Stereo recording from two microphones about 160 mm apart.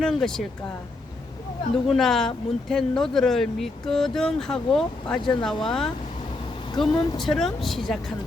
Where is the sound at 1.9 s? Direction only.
Centre (ahead or behind).